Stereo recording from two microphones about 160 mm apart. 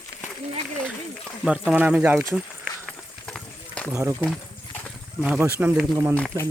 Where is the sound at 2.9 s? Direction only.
5° left (ahead or behind).